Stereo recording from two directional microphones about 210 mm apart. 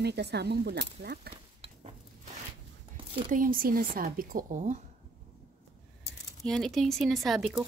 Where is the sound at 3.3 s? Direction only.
40° right (ahead or behind).